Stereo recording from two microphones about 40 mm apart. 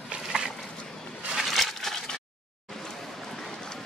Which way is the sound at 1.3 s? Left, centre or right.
Centre.